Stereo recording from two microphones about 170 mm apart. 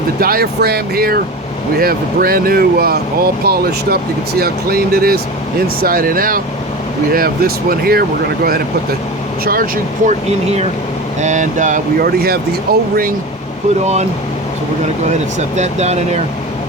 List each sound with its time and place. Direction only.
0.2 s speech: 60° right (ahead or behind)
9.4 s speech: 60° right (ahead or behind)
10.1 s speech: 40° right (ahead or behind); by 12.8 s 65° right (ahead or behind)
13.8 s speech: 40° right (ahead or behind)
15.5 s speech: 40° right (ahead or behind)